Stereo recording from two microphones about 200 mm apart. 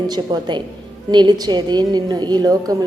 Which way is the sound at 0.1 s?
20° right (ahead or behind).